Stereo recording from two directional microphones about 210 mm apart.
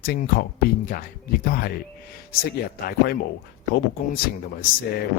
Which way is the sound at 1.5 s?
45° left (ahead or behind).